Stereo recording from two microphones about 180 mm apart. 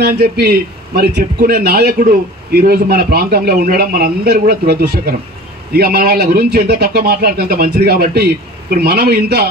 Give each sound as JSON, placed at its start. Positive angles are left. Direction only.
{"t": 0.0, "sound": "a man's voice", "side_deg": -60}